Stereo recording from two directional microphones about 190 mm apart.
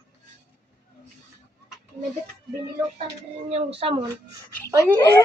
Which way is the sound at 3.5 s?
30° right (ahead or behind).